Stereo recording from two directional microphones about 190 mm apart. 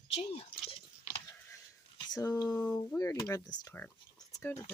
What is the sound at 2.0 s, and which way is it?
Speech, 20° left (ahead or behind).